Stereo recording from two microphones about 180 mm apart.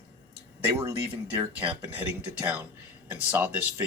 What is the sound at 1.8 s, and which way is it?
Speech, 10° right (ahead or behind).